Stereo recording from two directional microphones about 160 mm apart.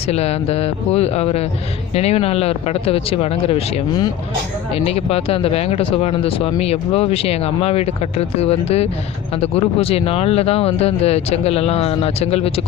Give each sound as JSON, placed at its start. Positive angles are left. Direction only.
{"t": 0.1, "sound": "speech", "side_deg": 40}
{"t": 4.7, "sound": "speech", "side_deg": 40}